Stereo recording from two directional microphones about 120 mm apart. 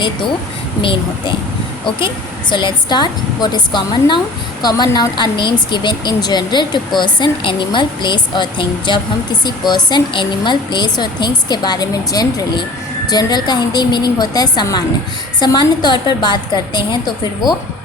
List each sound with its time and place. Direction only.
0.8 s speech: 45° left (ahead or behind)
2.5 s a woman's voice: 40° left (ahead or behind)